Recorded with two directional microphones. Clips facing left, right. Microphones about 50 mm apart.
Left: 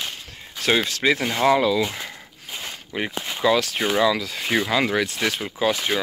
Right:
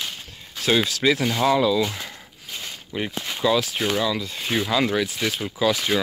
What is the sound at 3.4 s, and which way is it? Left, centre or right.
Speech, left.